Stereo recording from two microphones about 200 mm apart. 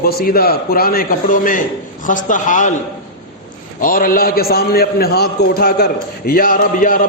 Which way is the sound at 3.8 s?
45° left (ahead or behind).